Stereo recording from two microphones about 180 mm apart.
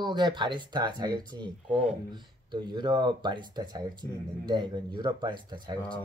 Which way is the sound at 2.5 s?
25° right (ahead or behind).